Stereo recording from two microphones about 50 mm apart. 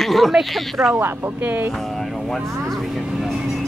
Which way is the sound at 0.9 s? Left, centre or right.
Right.